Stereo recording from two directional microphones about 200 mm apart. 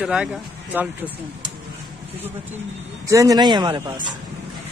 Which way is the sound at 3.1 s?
15° right (ahead or behind).